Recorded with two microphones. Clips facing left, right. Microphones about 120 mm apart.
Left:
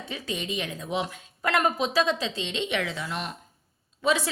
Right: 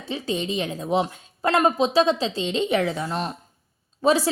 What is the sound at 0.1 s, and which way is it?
Speech, 30° right (ahead or behind).